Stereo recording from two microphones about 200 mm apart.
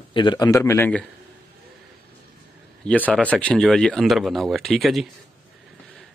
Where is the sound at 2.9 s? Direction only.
5° left (ahead or behind).